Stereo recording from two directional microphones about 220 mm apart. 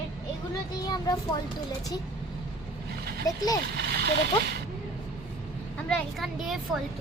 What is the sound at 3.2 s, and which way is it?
Child singing, 15° left (ahead or behind).